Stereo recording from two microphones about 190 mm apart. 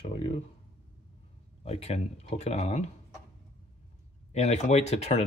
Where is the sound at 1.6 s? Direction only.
30° left (ahead or behind).